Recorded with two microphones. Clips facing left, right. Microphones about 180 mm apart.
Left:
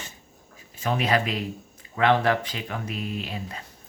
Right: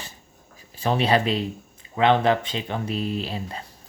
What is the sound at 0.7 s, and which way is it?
Speech, 30° right (ahead or behind).